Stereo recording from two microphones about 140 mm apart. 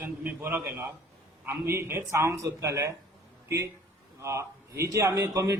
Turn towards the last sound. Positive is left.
turn(degrees=-25)  # may be behind; listen again after turning